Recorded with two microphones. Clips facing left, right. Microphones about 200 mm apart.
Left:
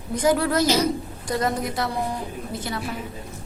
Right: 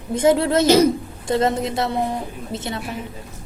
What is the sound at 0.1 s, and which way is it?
A woman's voice, 25° right (ahead or behind).